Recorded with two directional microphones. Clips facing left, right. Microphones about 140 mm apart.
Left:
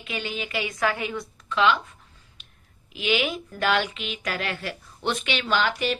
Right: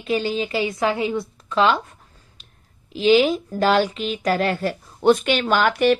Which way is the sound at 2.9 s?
35° right (ahead or behind).